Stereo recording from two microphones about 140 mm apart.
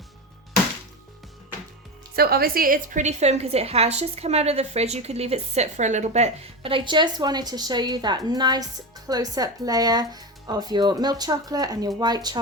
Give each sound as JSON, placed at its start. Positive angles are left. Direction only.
{"t": 2.1, "sound": "a woman's voice", "side_deg": -90}